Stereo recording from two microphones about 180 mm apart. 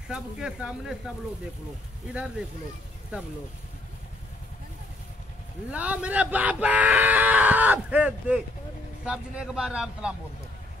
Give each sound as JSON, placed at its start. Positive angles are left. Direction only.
{"t": 0.1, "sound": "a man's voice", "side_deg": -5}
{"t": 3.1, "sound": "speech", "side_deg": -5}
{"t": 5.7, "sound": "a man's voice", "side_deg": -10}